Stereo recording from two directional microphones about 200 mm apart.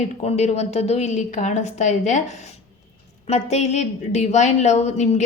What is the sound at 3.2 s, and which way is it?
A woman's voice, 35° left (ahead or behind).